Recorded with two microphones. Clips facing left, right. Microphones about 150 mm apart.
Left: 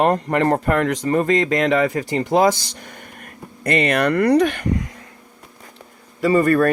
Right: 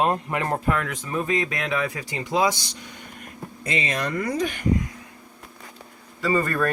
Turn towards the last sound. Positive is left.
turn(degrees=60)  # may be behind; listen again after turning